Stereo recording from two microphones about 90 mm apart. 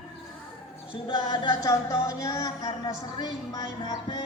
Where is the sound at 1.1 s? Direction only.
55° left (ahead or behind).